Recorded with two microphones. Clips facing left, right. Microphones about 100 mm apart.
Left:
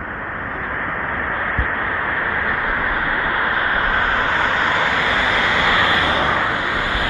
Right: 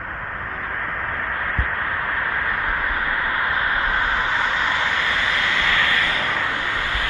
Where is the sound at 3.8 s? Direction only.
45° left (ahead or behind).